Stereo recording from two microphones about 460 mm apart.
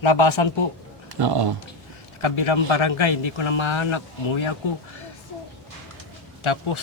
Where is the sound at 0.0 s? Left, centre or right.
Left.